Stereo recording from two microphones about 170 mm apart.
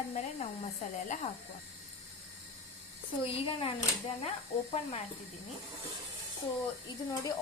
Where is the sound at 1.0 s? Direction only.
45° left (ahead or behind).